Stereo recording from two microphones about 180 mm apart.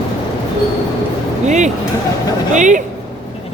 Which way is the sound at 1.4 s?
40° right (ahead or behind).